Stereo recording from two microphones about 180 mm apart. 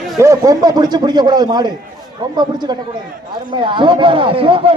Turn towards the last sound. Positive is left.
turn(degrees=-30)  # may be behind; listen again after turning